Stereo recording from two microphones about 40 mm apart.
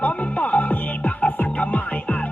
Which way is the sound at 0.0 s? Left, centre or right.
Left.